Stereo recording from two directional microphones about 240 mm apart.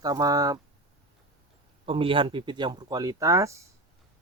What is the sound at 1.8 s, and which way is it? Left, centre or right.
Speech, right.